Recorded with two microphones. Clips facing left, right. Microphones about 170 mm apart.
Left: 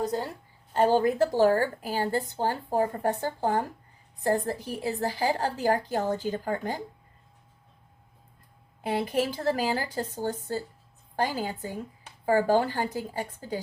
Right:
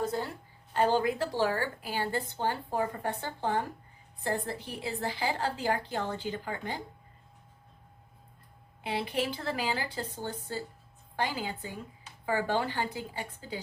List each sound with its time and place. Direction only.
0.0 s a woman's voice: 40° left (ahead or behind)
8.8 s a woman's voice: 45° left (ahead or behind)